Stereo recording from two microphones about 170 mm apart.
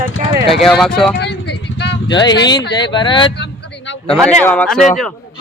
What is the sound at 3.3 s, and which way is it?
Vehicle, 85° left.